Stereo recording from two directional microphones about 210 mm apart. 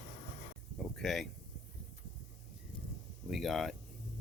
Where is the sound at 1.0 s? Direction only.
Centre (ahead or behind).